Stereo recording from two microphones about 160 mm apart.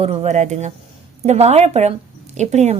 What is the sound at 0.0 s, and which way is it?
A woman's voice, 40° right (ahead or behind).